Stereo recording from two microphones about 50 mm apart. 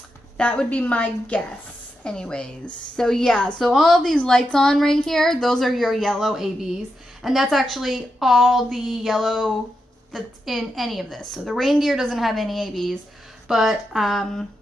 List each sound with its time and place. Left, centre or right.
0.4 s a woman's voice: left
3.7 s a woman's voice: centre
4.1 s a woman's voice: centre
6.3 s a woman's voice: centre
13.5 s speech: centre
14.1 s a woman's voice: centre